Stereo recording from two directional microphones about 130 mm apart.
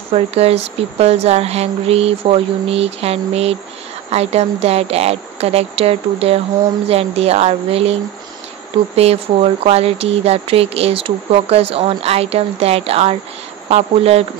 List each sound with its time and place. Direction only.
0.1 s speech: 50° right (ahead or behind)